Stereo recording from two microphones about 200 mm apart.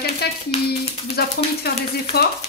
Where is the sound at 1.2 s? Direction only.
50° left (ahead or behind).